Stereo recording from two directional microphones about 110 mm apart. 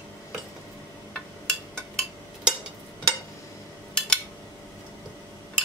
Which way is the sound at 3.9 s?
5° left (ahead or behind).